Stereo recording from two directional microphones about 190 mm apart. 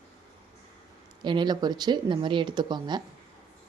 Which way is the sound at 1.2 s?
25° right (ahead or behind).